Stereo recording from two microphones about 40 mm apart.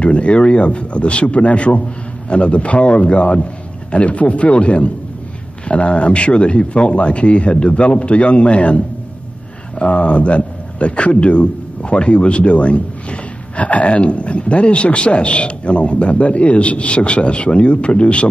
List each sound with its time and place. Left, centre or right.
0.0 s a man's voice: left